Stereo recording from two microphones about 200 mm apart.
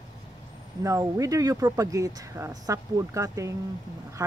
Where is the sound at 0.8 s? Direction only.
15° right (ahead or behind).